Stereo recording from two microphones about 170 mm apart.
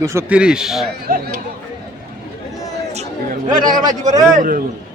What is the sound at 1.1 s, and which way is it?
Speech, 55° right (ahead or behind).